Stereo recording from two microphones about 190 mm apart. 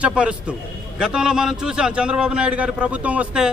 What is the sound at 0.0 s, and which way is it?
A man's voice, 5° right (ahead or behind).